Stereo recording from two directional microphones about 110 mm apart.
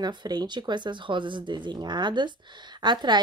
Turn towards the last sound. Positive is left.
turn(degrees=-40)  # may be behind; listen again after turning